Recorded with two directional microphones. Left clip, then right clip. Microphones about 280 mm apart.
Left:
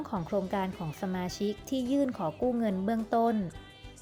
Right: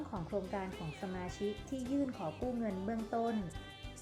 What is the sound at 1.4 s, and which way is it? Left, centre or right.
A woman's voice, left.